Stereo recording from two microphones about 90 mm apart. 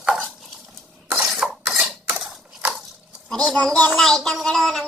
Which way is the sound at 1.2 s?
5° right (ahead or behind).